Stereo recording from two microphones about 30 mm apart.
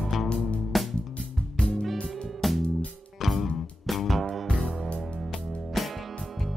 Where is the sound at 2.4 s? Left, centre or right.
Centre.